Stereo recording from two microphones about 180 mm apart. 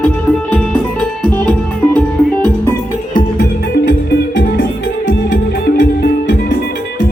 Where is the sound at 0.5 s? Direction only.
5° left (ahead or behind).